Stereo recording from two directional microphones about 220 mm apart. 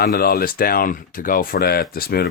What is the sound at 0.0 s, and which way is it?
Speech, 45° left (ahead or behind).